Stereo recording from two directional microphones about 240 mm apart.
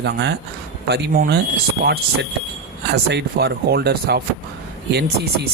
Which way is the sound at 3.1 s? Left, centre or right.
Right.